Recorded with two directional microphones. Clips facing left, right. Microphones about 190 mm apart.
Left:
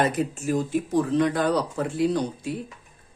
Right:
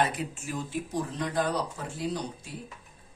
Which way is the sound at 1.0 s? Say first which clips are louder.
Left 8 dB; 75° left (ahead or behind).